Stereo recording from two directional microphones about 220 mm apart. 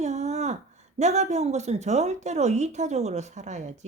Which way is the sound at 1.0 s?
30° right (ahead or behind).